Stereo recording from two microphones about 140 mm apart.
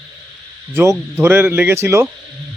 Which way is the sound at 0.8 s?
15° right (ahead or behind).